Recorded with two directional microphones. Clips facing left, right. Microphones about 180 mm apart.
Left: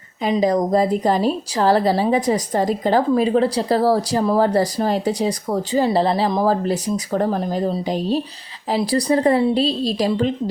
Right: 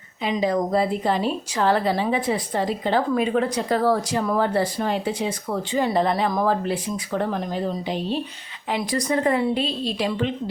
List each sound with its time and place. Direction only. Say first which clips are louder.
0.2 s speech: left 4 dB; 40° left (ahead or behind)